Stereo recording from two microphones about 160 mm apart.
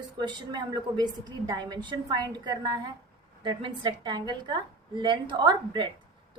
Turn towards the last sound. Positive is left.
turn(degrees=-30)  # may be behind; listen again after turning